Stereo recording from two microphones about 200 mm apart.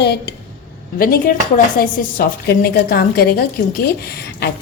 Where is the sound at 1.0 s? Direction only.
45° left (ahead or behind).